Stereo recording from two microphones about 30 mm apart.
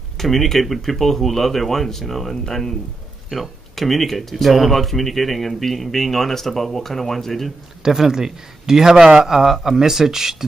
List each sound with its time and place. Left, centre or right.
0.2 s speech: centre
7.8 s speech: centre